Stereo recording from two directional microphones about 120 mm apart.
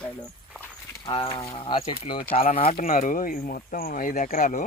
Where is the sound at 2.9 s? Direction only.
90° left.